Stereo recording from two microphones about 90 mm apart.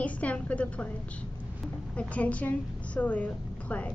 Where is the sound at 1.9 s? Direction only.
15° left (ahead or behind).